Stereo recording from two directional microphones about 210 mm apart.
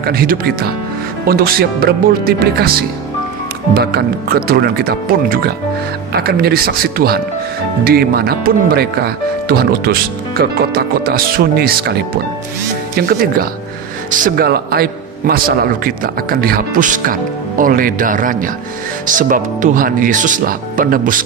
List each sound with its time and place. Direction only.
0.0 s a man's voice: 45° right (ahead or behind)
3.7 s a man's voice: 45° right (ahead or behind)